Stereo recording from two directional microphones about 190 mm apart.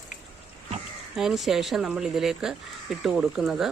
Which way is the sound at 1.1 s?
Centre (ahead or behind).